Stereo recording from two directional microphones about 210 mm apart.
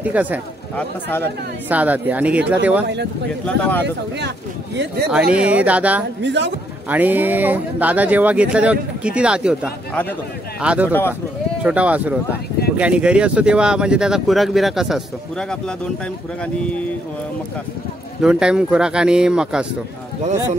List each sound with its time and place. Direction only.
0.0 s speech: 5° right (ahead or behind)
0.7 s speech: 10° left (ahead or behind)
1.7 s speech: 5° right (ahead or behind)
3.4 s speech: 5° left (ahead or behind)
5.3 s speech: 5° right (ahead or behind)
6.2 s a man's voice: 60° right (ahead or behind)
6.9 s speech: 10° right (ahead or behind)
10.9 s speech: 10° left (ahead or behind)
11.6 s speech: 5° right (ahead or behind)
18.2 s speech: 5° right (ahead or behind)